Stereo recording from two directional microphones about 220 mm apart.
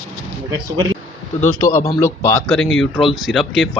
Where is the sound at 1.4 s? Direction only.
40° left (ahead or behind).